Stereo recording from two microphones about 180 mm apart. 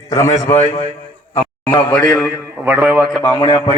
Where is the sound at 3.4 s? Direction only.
35° left (ahead or behind).